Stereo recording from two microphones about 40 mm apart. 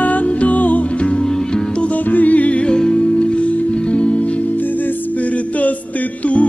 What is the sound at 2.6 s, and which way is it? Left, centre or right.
Music, centre.